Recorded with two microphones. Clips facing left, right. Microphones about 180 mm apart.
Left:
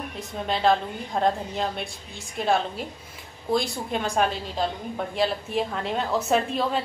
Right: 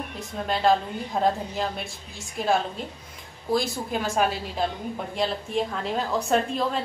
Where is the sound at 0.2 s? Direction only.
Centre (ahead or behind).